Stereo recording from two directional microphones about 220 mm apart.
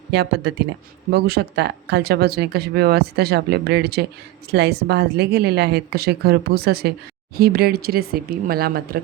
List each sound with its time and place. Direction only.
0.1 s speech: 50° right (ahead or behind)